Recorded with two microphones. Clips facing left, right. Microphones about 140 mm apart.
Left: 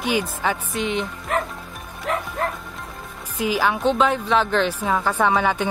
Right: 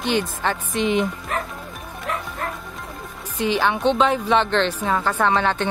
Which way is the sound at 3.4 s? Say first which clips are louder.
Right 1 dB; 5° left (ahead or behind).